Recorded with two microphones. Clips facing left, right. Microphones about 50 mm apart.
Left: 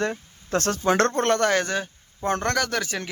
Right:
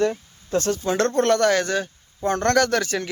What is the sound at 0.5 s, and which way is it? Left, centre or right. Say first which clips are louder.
Speech: right 2 dB; left.